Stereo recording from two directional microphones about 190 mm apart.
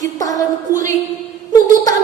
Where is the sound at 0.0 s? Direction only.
20° left (ahead or behind).